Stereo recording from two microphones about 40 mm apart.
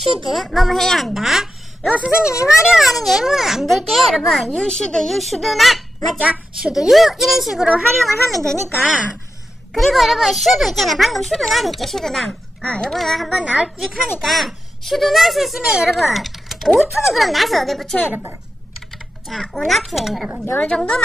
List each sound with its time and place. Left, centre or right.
0.0 s a child's voice: centre
2.0 s a child's voice: centre
3.3 s a child's voice: centre
3.6 s a child's voice: centre
4.6 s a child's voice: centre
6.6 s a child's voice: centre
12.6 s a woman's voice: left
12.9 s a child's voice: centre
14.2 s a child's voice: centre
19.2 s a child's voice: centre
20.6 s a woman's voice: left